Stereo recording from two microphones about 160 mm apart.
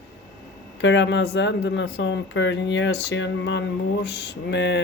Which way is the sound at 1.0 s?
90° left.